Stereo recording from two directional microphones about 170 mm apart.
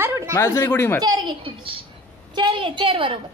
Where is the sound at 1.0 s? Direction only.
25° right (ahead or behind).